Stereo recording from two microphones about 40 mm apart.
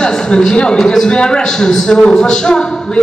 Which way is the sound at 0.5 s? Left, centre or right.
Centre.